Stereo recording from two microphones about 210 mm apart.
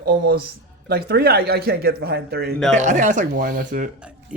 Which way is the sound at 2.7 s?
35° right (ahead or behind).